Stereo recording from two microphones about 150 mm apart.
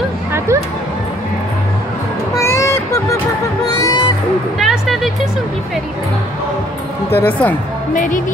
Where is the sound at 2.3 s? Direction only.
20° left (ahead or behind).